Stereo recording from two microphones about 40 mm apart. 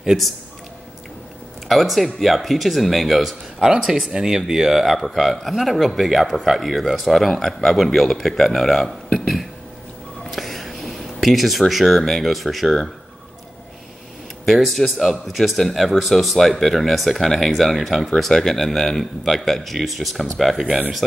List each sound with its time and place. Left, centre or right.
1.7 s speech: centre
3.5 s speech: centre
5.0 s speech: centre
10.2 s a sound: centre
14.4 s speech: centre
18.3 s speech: centre